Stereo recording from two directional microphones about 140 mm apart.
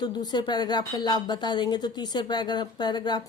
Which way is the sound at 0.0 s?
30° left (ahead or behind).